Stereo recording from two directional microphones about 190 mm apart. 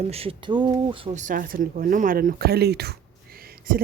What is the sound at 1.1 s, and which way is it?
Speech, 40° right (ahead or behind).